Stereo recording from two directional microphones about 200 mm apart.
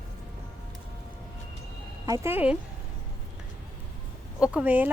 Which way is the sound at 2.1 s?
15° right (ahead or behind).